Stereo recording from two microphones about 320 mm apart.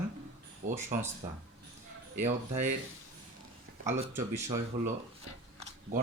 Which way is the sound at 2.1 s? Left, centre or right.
Right.